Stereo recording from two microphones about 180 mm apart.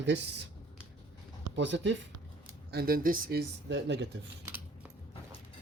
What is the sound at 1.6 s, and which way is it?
Speech, 90° right.